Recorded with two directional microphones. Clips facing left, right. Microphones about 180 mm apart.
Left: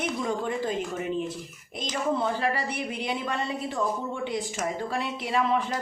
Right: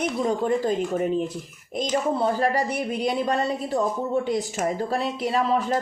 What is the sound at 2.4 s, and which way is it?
Speech, 40° right (ahead or behind).